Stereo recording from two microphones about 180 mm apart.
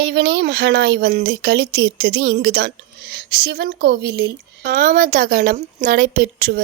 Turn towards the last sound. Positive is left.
turn(degrees=-55)  # may be behind; listen again after turning